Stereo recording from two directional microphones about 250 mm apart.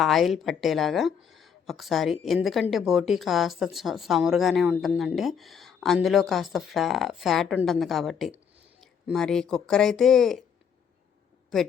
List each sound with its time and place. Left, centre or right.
0.0 s speech: centre